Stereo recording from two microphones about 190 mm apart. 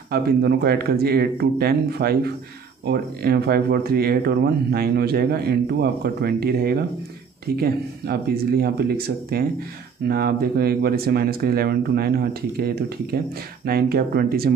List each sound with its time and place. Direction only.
0.1 s speech: 55° right (ahead or behind)